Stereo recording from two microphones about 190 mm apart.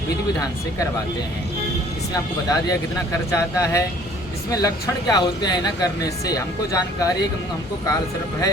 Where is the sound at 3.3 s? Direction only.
15° left (ahead or behind).